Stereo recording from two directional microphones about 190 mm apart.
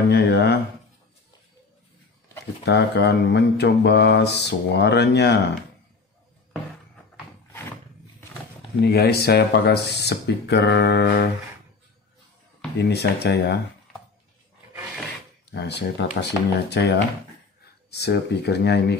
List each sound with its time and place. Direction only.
0.1 s speech: 60° left (ahead or behind)
2.6 s mantra: 60° left (ahead or behind)
8.8 s mantra: 60° left (ahead or behind)
12.8 s mantra: 60° left (ahead or behind)
15.5 s mantra: 65° left (ahead or behind)